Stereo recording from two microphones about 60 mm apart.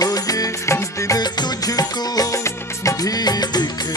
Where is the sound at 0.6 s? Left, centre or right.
Left.